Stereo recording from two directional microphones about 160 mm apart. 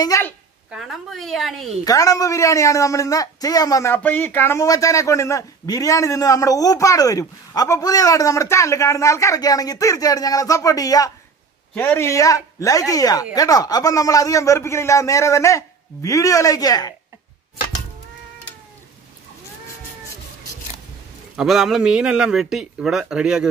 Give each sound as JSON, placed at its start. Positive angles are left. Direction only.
{"t": 0.0, "sound": "a man's voice", "side_deg": 20}
{"t": 0.7, "sound": "a man's voice", "side_deg": 0}
{"t": 1.9, "sound": "a man's voice", "side_deg": 20}
{"t": 11.7, "sound": "a man's voice", "side_deg": 10}
{"t": 21.4, "sound": "a man's voice", "side_deg": 0}